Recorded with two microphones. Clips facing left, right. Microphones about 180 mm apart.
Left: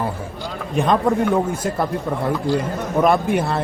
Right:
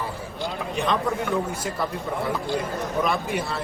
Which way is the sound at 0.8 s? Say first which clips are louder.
Left 7 dB; 50° left (ahead or behind).